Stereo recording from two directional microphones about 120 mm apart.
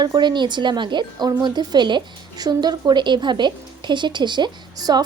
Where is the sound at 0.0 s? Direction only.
35° right (ahead or behind).